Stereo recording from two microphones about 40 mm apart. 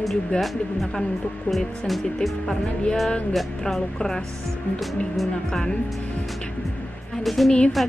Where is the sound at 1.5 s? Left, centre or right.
Centre.